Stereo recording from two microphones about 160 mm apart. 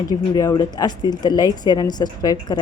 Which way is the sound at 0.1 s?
25° left (ahead or behind).